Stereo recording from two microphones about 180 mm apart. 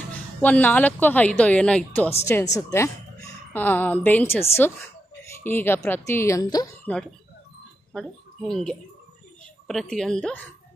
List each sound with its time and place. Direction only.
0.4 s speech: 10° left (ahead or behind)
6.9 s a woman's voice: 10° left (ahead or behind)